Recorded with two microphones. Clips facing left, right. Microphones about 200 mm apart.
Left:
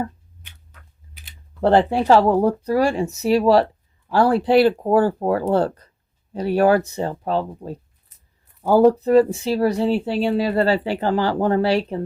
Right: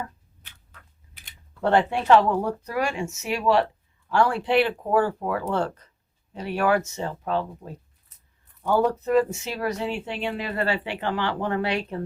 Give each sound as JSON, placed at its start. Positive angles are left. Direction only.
{"t": 1.6, "sound": "speech", "side_deg": 35}